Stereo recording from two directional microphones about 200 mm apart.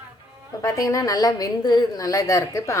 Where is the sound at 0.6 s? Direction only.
15° left (ahead or behind).